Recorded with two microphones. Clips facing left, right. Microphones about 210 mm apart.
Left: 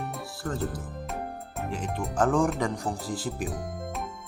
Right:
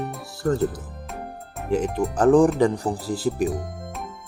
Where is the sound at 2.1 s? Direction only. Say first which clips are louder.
Right 8 dB; 35° right (ahead or behind).